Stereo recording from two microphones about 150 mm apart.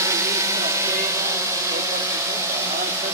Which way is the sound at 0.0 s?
20° right (ahead or behind).